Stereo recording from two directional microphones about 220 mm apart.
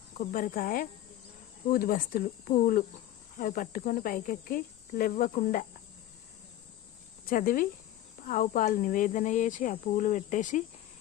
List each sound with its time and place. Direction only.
0.2 s speech: 35° left (ahead or behind)
7.3 s speech: 40° left (ahead or behind)